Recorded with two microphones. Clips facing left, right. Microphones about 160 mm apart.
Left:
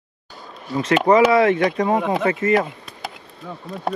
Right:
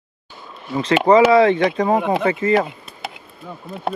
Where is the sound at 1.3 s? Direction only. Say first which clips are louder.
Right 3 dB; 25° right (ahead or behind).